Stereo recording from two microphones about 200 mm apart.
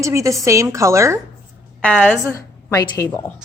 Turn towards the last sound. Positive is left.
turn(degrees=15)  # may be behind; listen again after turning